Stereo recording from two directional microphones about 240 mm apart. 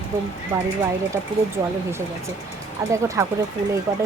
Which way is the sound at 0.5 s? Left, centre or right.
Centre.